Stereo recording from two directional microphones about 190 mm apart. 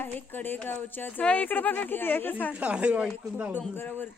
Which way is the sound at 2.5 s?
5° right (ahead or behind).